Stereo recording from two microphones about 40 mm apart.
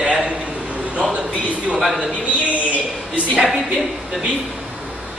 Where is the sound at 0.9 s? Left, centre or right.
Right.